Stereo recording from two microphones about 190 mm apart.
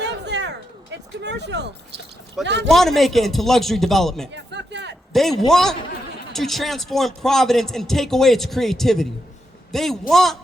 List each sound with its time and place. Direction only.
0.0 s a sound: 65° right (ahead or behind)
2.4 s speech: 65° right (ahead or behind)
2.6 s a man's voice: centre (ahead or behind)
4.3 s speech: 65° right (ahead or behind)
5.5 s a man's voice: centre (ahead or behind)